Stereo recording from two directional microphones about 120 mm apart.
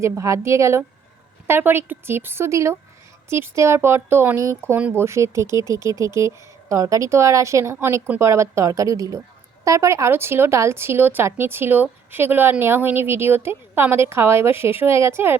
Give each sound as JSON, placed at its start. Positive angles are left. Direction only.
{"t": 0.0, "sound": "speech", "side_deg": -25}
{"t": 4.8, "sound": "speech", "side_deg": -10}
{"t": 5.0, "sound": "speech", "side_deg": -25}